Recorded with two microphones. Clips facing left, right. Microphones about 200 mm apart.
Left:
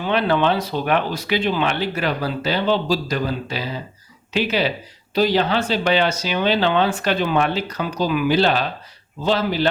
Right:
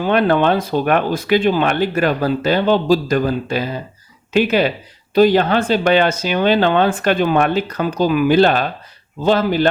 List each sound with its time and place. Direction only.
0.0 s speech: 50° right (ahead or behind)